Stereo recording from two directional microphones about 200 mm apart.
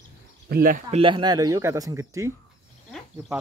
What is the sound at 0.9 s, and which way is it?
Speech, 25° right (ahead or behind).